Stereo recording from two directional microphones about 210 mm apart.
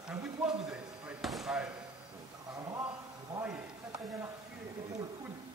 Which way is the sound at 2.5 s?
15° right (ahead or behind).